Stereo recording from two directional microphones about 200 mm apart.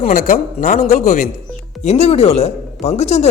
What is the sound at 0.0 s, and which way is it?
Speech, 40° left (ahead or behind).